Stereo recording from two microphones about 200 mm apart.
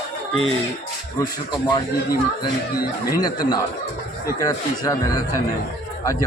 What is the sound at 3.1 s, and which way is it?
A man's voice, 20° left (ahead or behind).